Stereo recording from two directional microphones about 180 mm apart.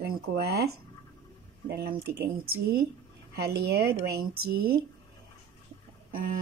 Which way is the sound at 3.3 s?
60° right (ahead or behind).